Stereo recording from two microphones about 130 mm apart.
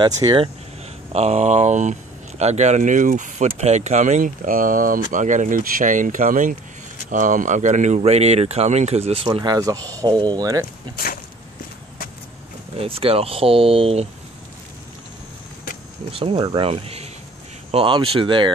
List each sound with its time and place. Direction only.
0.0 s speech: 30° right (ahead or behind)
1.1 s speech: 55° right (ahead or behind); by 5.0 s 90° right
5.1 s speech: 75° right (ahead or behind); by 9.4 s 45° right (ahead or behind)
9.4 s speech: 30° right (ahead or behind)
12.7 s speech: 45° right (ahead or behind)
16.1 s speech: 45° right (ahead or behind)